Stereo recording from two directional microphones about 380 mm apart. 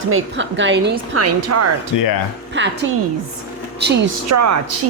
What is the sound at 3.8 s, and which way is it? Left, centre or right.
Speech, right.